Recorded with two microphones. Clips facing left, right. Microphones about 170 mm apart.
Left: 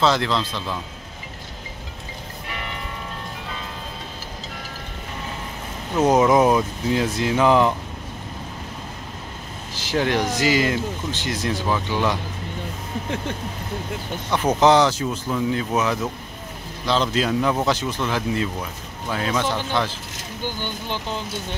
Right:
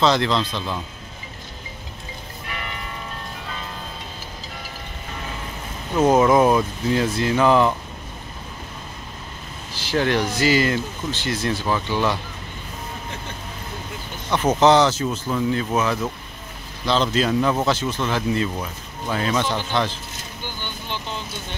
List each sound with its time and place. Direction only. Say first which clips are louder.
0.0 s speech: right 1 dB; 5° left (ahead or behind)
5.9 s speech: right 1 dB; centre (ahead or behind)
6.9 s speech: right 1 dB; 15° left (ahead or behind)
9.8 s speech: right 1 dB; 15° left (ahead or behind)
14.3 s speech: right 1 dB; 10° left (ahead or behind)